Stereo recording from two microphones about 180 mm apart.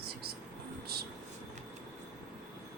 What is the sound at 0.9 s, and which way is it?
Speech, 60° right (ahead or behind).